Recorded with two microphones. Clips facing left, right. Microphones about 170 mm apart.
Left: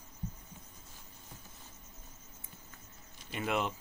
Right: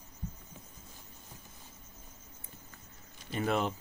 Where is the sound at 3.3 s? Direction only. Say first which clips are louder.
Right 3 dB; 40° right (ahead or behind).